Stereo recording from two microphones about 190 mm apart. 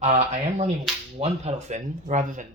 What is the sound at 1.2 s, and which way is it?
Speech, 35° right (ahead or behind).